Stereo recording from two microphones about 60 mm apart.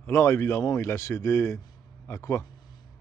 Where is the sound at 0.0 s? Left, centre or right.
Left.